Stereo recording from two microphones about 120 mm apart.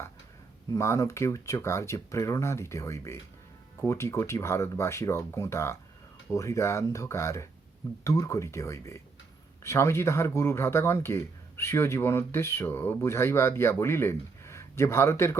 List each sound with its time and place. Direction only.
0.7 s speech: 25° left (ahead or behind)